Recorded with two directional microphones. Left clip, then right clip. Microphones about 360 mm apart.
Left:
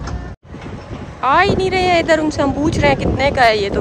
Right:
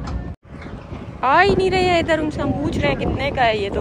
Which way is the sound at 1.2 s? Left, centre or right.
Centre.